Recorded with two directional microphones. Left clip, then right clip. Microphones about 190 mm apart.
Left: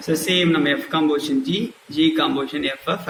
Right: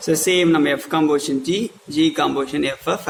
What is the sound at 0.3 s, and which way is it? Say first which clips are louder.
A man's voice: right 2 dB; 50° right (ahead or behind).